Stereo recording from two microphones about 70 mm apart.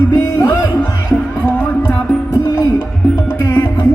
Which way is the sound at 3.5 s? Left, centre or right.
Left.